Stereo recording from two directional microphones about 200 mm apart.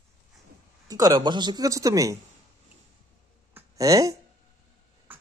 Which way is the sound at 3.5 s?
15° right (ahead or behind).